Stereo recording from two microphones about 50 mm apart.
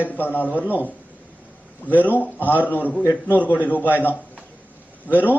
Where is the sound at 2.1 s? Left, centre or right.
Left.